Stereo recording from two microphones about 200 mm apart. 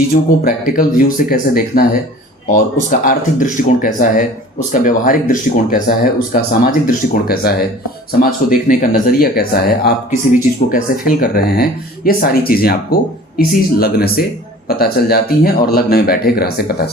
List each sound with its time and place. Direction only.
0.1 s speech: 45° left (ahead or behind)